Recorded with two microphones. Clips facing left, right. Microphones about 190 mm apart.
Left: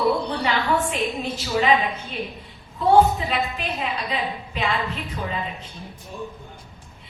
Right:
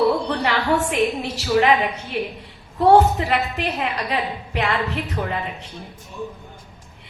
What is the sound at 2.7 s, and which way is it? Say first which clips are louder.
A woman's voice: right 2 dB; 70° right (ahead or behind).